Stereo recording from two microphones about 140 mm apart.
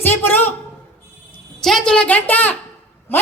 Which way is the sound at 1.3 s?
5° left (ahead or behind).